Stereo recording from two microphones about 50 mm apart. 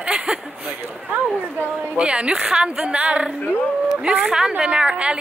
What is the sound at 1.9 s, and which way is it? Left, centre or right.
A woman's voice, right.